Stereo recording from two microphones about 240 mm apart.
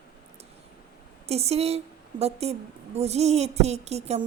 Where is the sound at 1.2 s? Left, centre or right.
Right.